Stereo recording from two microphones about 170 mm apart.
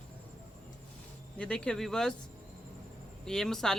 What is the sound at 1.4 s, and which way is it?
Speech, 5° left (ahead or behind).